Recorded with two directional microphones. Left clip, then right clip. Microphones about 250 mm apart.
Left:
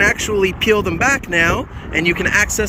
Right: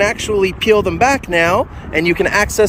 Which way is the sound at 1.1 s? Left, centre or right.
Centre.